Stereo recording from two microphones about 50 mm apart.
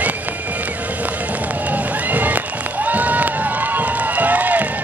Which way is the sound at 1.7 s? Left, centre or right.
Right.